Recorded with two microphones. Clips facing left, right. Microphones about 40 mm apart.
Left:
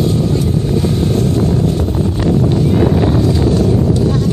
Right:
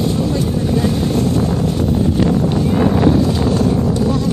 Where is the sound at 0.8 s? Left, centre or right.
Right.